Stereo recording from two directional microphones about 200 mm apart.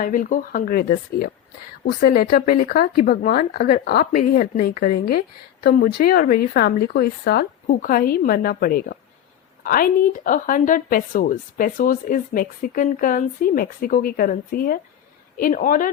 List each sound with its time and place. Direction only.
0.0 s speech: 40° left (ahead or behind)